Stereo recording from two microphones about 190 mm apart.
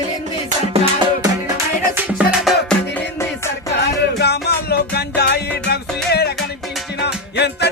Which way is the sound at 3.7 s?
60° left (ahead or behind).